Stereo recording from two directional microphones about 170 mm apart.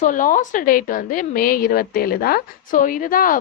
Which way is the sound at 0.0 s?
50° left (ahead or behind).